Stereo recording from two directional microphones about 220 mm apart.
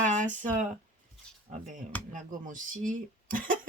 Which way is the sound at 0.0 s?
35° right (ahead or behind).